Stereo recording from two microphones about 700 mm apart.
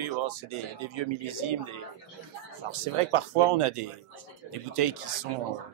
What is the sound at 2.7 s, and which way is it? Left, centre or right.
A man's voice, right.